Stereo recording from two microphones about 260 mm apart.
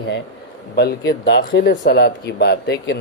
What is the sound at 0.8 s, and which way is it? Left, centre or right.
Speech, left.